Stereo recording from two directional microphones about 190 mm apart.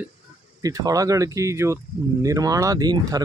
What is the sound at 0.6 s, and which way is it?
Speech, 20° right (ahead or behind).